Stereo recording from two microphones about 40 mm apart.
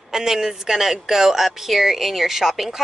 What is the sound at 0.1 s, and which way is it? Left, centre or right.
Speech, centre.